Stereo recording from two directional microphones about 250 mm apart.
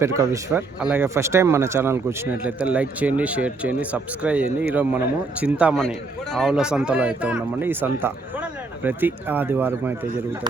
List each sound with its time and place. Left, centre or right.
0.0 s speech: centre